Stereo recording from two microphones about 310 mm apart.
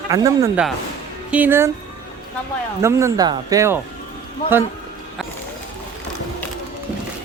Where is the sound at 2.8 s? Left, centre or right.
Centre.